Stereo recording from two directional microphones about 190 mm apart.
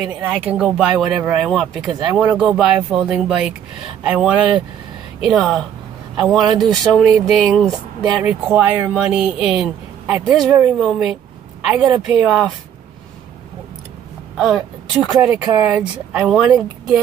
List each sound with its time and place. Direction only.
0.0 s a man's voice: 10° right (ahead or behind)
8.2 s speech: 10° right (ahead or behind)
14.3 s speech: centre (ahead or behind)